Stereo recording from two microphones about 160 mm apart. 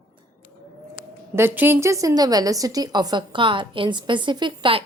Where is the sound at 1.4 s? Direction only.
15° right (ahead or behind).